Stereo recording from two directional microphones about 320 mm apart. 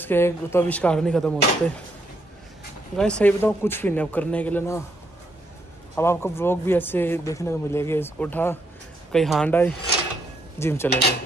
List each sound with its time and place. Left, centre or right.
0.0 s a man's voice: centre
3.0 s a man's voice: centre
5.9 s a man's voice: centre
10.9 s dishes: left